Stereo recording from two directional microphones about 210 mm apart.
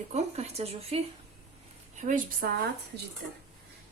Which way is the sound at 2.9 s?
55° right (ahead or behind).